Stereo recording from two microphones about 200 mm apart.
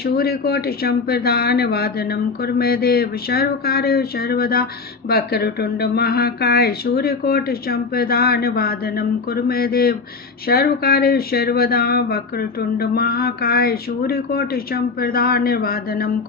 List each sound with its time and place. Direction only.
0.0 s speech: 50° left (ahead or behind)